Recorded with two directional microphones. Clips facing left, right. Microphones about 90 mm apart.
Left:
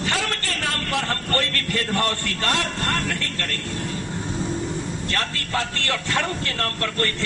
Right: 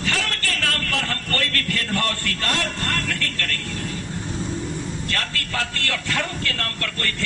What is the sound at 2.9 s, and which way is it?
Vehicle, 25° left (ahead or behind).